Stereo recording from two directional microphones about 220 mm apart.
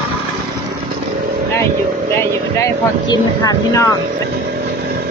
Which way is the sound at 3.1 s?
15° left (ahead or behind).